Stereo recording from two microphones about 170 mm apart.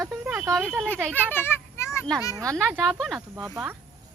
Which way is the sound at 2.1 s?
5° left (ahead or behind).